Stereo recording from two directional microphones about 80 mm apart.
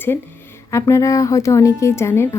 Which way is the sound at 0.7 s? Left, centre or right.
Left.